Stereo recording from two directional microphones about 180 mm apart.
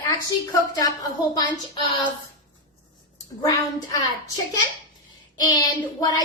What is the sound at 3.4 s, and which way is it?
Speech, 20° left (ahead or behind).